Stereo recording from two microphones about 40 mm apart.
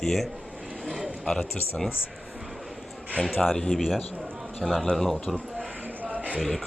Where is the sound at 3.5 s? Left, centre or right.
Centre.